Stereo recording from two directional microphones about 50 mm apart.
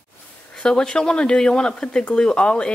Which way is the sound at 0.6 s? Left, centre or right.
Centre.